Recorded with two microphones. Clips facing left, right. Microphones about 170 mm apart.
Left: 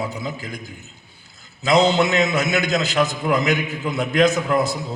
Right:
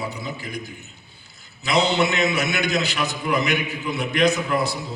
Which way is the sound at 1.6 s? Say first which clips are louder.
Left 4 dB; 45° left (ahead or behind).